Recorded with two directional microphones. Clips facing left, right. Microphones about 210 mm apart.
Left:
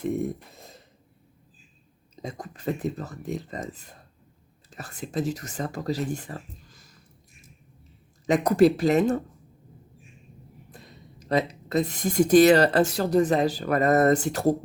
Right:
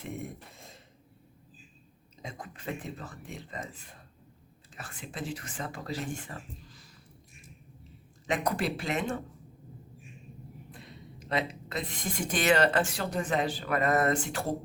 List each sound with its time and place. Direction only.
0.5 s a sound: 40° left (ahead or behind)
2.2 s speech: 40° left (ahead or behind)
8.3 s speech: 40° left (ahead or behind)
10.7 s speech: 40° left (ahead or behind)